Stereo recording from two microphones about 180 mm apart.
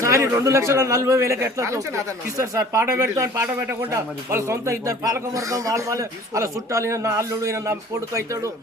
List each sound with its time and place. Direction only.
0.0 s speech: 15° right (ahead or behind)